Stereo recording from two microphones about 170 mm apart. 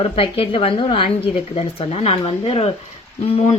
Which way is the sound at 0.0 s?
35° left (ahead or behind).